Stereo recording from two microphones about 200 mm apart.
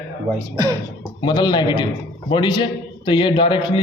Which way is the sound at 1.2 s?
20° left (ahead or behind).